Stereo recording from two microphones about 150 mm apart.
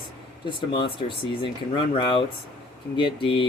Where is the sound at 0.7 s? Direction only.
35° left (ahead or behind).